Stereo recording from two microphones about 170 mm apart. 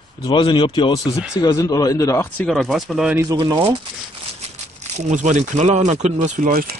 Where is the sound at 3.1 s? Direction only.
15° right (ahead or behind).